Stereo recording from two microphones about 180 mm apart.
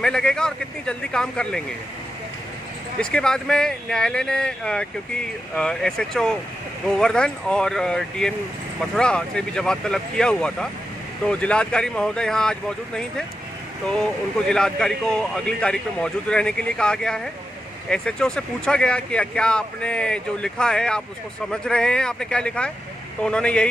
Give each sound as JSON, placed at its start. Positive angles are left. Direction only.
{"t": 0.0, "sound": "speech", "side_deg": 5}
{"t": 3.0, "sound": "speech", "side_deg": 5}